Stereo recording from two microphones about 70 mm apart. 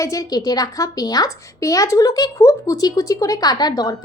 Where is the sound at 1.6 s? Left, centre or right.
Left.